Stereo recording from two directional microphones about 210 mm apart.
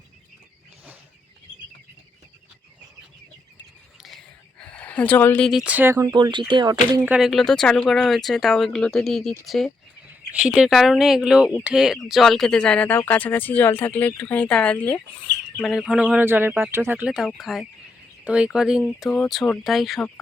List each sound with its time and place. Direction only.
4.6 s speech: 5° left (ahead or behind); by 6.7 s 20° right (ahead or behind)
7.0 s speech: 5° right (ahead or behind)